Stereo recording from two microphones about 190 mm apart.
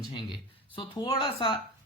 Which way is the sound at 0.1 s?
25° left (ahead or behind).